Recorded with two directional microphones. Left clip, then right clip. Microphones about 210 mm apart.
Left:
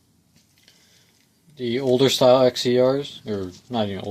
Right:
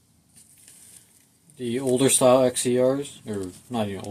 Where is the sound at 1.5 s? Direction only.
30° left (ahead or behind).